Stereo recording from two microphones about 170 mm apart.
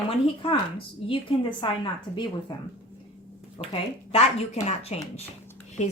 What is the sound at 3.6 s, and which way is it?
Speech, 25° left (ahead or behind).